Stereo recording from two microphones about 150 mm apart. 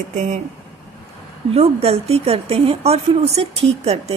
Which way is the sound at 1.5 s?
40° right (ahead or behind).